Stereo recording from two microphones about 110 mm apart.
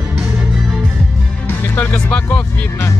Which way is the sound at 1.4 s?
20° left (ahead or behind).